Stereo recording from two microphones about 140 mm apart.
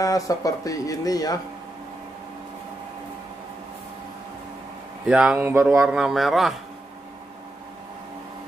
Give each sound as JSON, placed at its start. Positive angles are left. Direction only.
{"t": 0.0, "sound": "speech", "side_deg": 25}
{"t": 5.0, "sound": "speech", "side_deg": -5}
{"t": 5.8, "sound": "a man's voice", "side_deg": -5}